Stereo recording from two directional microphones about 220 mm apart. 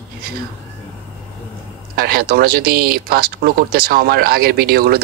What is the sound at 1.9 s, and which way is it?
Speech, 45° right (ahead or behind).